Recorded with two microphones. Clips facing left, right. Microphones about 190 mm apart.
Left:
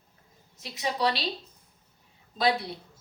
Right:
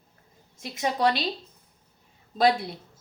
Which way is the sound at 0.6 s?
50° right (ahead or behind).